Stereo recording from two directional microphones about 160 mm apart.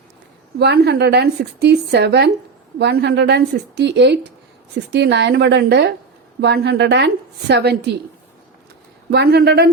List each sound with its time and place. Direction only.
0.6 s a woman's voice: 90° right
9.0 s a woman's voice: 85° right